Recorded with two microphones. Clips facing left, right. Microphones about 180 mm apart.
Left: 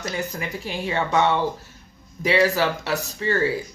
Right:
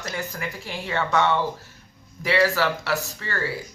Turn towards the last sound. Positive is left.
turn(degrees=20)  # may be behind; listen again after turning